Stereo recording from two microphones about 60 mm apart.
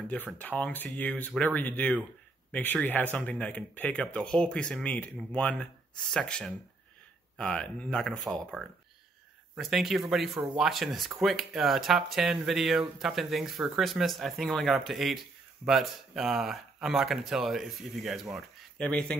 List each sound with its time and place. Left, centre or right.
0.4 s speech: left
9.6 s speech: centre
18.8 s speech: centre